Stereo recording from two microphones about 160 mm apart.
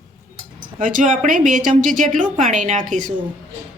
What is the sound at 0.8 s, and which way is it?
A woman's voice, 55° right (ahead or behind).